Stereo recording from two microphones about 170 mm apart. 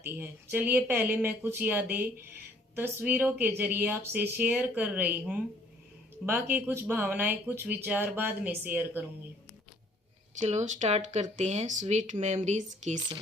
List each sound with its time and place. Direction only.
0.0 s speech: 10° right (ahead or behind)
10.4 s speech: 45° right (ahead or behind)